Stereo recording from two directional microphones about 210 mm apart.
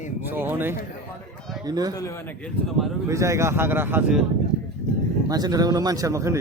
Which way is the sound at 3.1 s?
15° right (ahead or behind).